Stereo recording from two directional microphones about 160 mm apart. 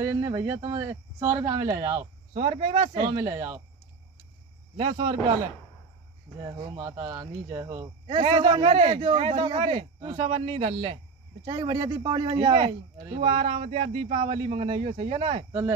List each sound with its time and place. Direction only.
0.0 s speech: 20° right (ahead or behind)
2.3 s a man's voice: 40° right (ahead or behind)
3.1 s speech: 20° right (ahead or behind)
4.7 s a man's voice: 35° right (ahead or behind)
6.6 s speech: 20° right (ahead or behind)
8.1 s a man's voice: 35° right (ahead or behind)